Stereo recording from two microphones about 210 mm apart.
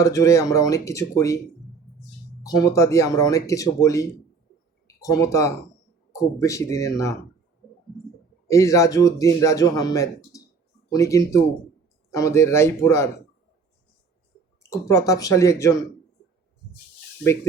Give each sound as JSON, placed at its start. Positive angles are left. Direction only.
{"t": 0.0, "sound": "speech", "side_deg": 15}
{"t": 2.4, "sound": "speech", "side_deg": 15}
{"t": 8.4, "sound": "speech", "side_deg": 15}
{"t": 14.6, "sound": "speech", "side_deg": 15}